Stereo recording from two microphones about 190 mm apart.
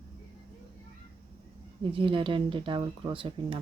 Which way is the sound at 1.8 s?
25° right (ahead or behind).